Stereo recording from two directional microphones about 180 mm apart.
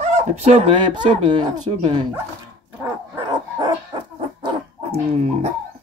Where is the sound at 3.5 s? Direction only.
25° right (ahead or behind).